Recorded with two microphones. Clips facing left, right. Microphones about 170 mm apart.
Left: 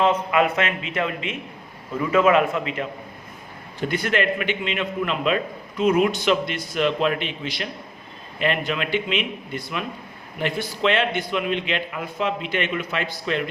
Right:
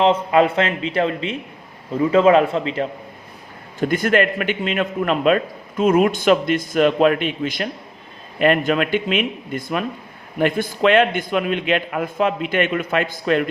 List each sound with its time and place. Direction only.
0.0 s speech: 30° right (ahead or behind)
3.8 s a man's voice: 45° right (ahead or behind)